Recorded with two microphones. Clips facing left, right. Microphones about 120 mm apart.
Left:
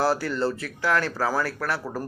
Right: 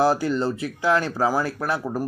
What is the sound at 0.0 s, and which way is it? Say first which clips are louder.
Speech: right 3 dB; 15° right (ahead or behind).